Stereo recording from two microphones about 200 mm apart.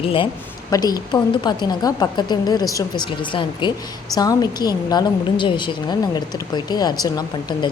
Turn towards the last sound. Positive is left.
turn(degrees=20)  # may be behind; listen again after turning